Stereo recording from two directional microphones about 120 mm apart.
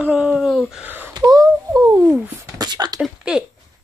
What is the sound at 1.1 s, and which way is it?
Speech, 35° right (ahead or behind).